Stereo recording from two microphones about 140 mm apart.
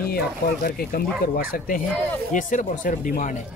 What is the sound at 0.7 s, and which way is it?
Speech, 90° left.